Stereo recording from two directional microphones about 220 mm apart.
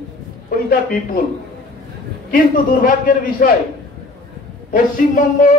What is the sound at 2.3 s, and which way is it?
A man's voice, 40° left (ahead or behind).